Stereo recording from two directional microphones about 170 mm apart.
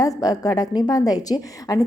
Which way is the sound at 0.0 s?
20° left (ahead or behind).